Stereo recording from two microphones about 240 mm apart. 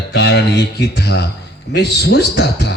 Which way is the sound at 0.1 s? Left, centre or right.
Left.